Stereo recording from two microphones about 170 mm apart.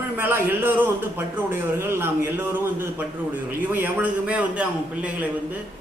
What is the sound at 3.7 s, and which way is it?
A man's voice, 10° right (ahead or behind).